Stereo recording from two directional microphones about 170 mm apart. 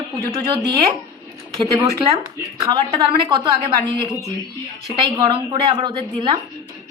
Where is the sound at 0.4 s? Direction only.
25° right (ahead or behind).